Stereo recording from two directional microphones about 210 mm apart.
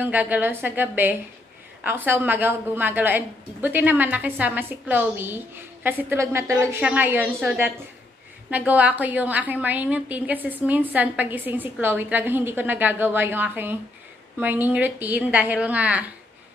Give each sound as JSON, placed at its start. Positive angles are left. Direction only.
{"t": 0.0, "sound": "a woman's voice", "side_deg": -10}
{"t": 8.5, "sound": "a woman's voice", "side_deg": -5}